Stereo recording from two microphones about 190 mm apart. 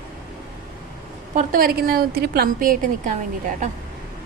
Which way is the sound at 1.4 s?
50° right (ahead or behind).